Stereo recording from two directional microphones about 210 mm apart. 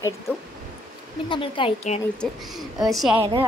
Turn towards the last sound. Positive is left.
turn(degrees=0)  # may be behind; listen again after turning